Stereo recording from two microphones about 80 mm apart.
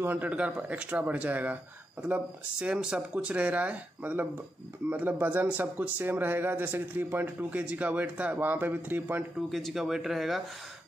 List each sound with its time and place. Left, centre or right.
0.0 s speech: right
9.5 s speech: centre